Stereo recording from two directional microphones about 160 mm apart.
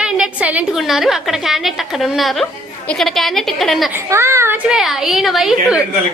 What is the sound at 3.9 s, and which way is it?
Speech, 15° right (ahead or behind).